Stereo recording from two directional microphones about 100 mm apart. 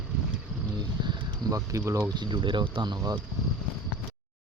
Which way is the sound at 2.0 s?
45° right (ahead or behind).